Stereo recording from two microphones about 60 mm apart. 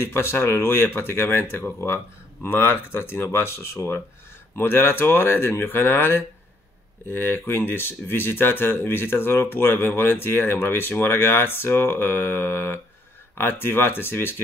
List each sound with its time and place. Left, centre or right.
0.0 s speech: left